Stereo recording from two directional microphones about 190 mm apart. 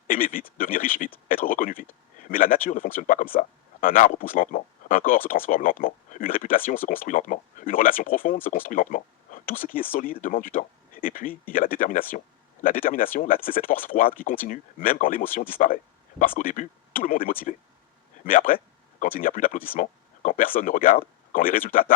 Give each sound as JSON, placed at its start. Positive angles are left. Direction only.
{"t": 0.1, "sound": "speech", "side_deg": 45}